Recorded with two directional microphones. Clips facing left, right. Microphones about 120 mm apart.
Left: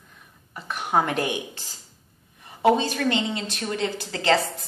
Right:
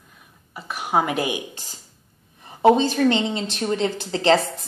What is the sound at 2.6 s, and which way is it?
A woman's voice, 20° right (ahead or behind).